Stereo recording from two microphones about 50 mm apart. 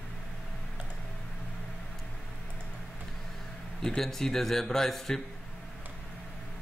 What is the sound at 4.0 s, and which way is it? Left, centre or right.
Speech, centre.